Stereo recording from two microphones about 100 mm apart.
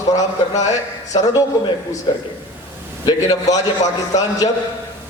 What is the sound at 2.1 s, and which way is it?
Speech, 55° left (ahead or behind).